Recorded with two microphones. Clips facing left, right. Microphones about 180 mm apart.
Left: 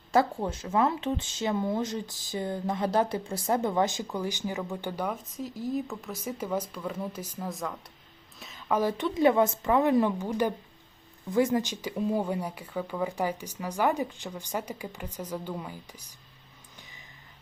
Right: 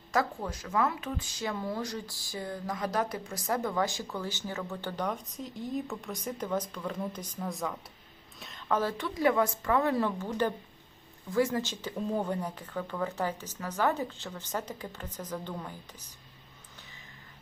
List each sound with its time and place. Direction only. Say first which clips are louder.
0.1 s speech: left 5 dB; 30° left (ahead or behind); by 16.1 s 10° left (ahead or behind)